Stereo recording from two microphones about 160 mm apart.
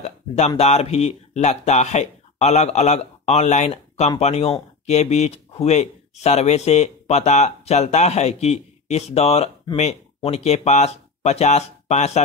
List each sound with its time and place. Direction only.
0.6 s speech: 40° left (ahead or behind)